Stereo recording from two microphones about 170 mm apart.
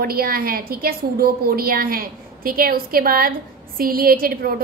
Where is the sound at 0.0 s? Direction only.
60° right (ahead or behind).